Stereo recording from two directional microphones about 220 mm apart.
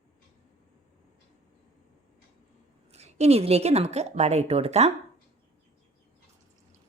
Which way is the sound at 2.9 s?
30° right (ahead or behind).